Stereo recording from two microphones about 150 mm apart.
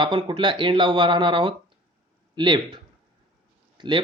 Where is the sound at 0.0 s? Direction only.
35° right (ahead or behind).